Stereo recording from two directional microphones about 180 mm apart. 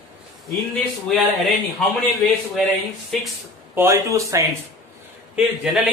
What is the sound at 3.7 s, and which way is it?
Speech, 15° right (ahead or behind).